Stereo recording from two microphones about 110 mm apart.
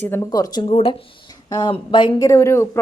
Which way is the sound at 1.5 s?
45° left (ahead or behind).